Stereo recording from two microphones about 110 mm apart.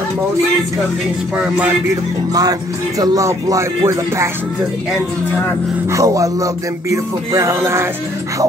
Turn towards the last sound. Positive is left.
turn(degrees=-25)  # may be behind; listen again after turning